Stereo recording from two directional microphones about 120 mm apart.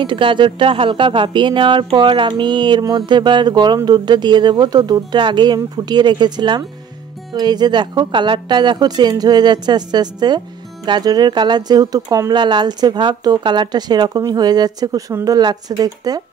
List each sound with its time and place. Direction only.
0.0 s speech: 45° right (ahead or behind)